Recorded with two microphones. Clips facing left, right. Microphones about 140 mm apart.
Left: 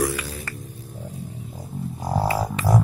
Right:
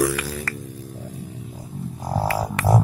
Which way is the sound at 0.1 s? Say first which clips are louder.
Right 3 dB; 70° right (ahead or behind).